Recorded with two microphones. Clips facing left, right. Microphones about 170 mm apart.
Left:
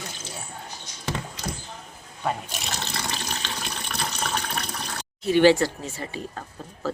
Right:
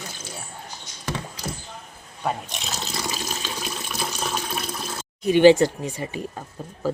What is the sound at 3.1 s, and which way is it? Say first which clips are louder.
Water: right 2 dB; 5° right (ahead or behind).